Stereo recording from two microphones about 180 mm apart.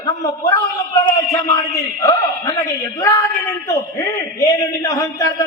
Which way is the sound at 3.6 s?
20° left (ahead or behind).